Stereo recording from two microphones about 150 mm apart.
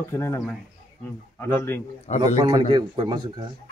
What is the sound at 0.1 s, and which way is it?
Speech, 20° left (ahead or behind).